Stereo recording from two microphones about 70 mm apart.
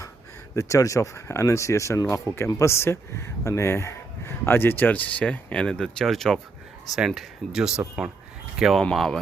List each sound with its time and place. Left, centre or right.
0.5 s speech: left; by 8.8 s centre
8.8 s speech: centre